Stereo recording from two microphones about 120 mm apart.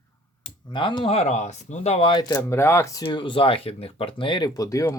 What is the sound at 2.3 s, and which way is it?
Groan, 20° left (ahead or behind).